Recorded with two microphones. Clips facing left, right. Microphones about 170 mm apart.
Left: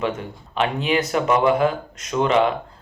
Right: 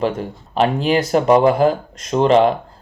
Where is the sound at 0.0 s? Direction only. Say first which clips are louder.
Right 4 dB; 35° right (ahead or behind).